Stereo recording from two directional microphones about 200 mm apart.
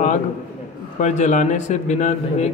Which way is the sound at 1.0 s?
35° left (ahead or behind).